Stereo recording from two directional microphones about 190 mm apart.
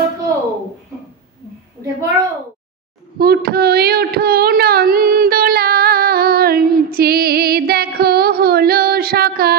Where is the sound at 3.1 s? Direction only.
55° right (ahead or behind).